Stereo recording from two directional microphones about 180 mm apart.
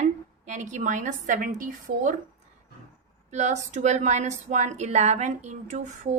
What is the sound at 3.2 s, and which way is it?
A woman's voice, 40° right (ahead or behind).